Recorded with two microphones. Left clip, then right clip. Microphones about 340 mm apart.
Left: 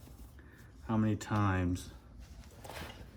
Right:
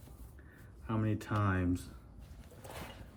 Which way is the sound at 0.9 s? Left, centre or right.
Left.